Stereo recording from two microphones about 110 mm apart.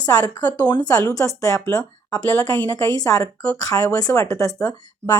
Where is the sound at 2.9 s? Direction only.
30° left (ahead or behind).